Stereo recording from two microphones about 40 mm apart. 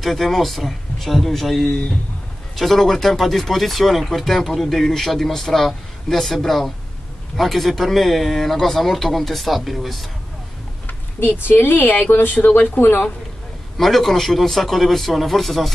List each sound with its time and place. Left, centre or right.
0.0 s speech: centre
10.9 s a sound: left
11.4 s speech: left
13.7 s speech: centre